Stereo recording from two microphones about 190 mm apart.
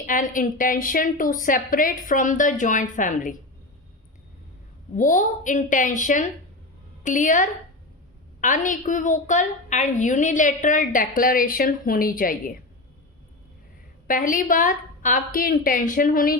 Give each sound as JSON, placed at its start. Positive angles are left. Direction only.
{"t": 0.0, "sound": "a woman's voice", "side_deg": 45}
{"t": 4.9, "sound": "a woman's voice", "side_deg": 45}
{"t": 14.1, "sound": "a woman's voice", "side_deg": 45}